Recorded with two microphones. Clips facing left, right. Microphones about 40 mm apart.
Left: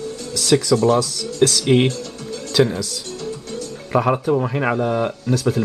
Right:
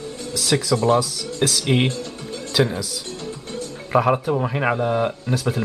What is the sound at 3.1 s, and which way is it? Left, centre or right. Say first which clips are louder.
Music: left 3 dB; right.